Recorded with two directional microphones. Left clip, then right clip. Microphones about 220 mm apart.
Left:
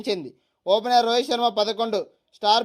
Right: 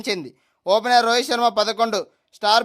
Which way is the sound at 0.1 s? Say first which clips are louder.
Right 1 dB; 20° right (ahead or behind).